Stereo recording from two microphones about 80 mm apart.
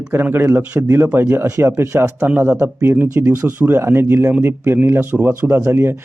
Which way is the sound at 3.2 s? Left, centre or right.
Right.